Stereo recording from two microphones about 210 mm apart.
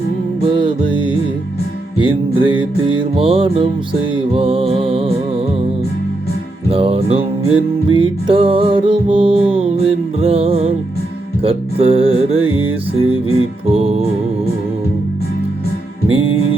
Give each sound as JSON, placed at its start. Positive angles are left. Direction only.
{"t": 0.4, "sound": "music", "side_deg": -25}
{"t": 6.7, "sound": "music", "side_deg": -25}
{"t": 13.0, "sound": "music", "side_deg": -75}
{"t": 13.7, "sound": "music", "side_deg": -30}
{"t": 16.2, "sound": "music", "side_deg": -80}